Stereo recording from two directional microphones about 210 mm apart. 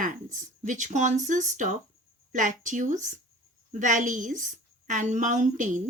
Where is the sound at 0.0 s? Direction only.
40° right (ahead or behind).